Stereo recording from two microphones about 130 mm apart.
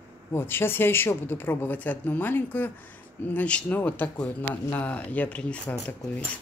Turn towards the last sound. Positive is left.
turn(degrees=10)  # may be behind; listen again after turning